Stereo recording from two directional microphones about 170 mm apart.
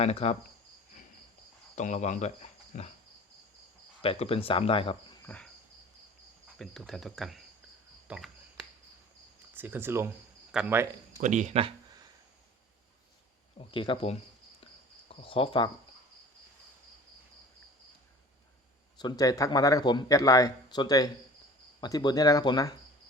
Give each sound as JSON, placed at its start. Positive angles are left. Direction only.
{"t": 0.0, "sound": "speech", "side_deg": 40}
{"t": 1.7, "sound": "speech", "side_deg": 45}
{"t": 4.0, "sound": "speech", "side_deg": 35}
{"t": 5.2, "sound": "cricket", "side_deg": 10}
{"t": 6.6, "sound": "speech", "side_deg": 0}
{"t": 8.0, "sound": "a sound", "side_deg": -5}
{"t": 9.6, "sound": "speech", "side_deg": -10}
{"t": 11.2, "sound": "speech", "side_deg": -45}
{"t": 13.6, "sound": "speech", "side_deg": 30}
{"t": 18.9, "sound": "speech", "side_deg": 25}